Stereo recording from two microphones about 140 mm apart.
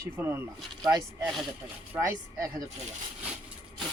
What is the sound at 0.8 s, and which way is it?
Speech, 30° right (ahead or behind).